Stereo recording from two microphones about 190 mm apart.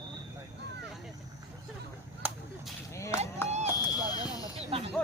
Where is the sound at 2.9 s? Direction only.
15° left (ahead or behind).